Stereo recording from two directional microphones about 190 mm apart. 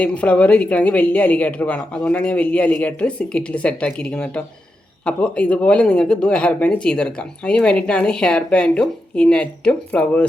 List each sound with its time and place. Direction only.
0.0 s a woman's voice: 5° left (ahead or behind)